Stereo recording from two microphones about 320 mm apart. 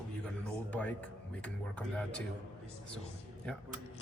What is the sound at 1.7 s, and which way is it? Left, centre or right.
Speech, centre.